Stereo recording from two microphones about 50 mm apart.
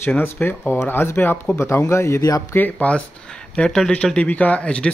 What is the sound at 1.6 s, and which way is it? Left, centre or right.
Speech, left.